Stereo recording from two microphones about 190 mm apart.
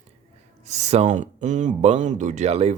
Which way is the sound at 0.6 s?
35° right (ahead or behind).